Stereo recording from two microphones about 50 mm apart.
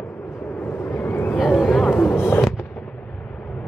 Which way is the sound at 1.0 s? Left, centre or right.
Left.